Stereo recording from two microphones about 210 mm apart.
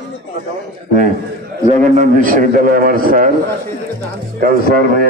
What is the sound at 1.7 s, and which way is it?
A man's voice, 35° right (ahead or behind).